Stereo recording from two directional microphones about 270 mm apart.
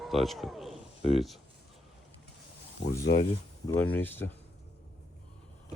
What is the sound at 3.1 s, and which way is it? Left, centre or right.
Speech, left.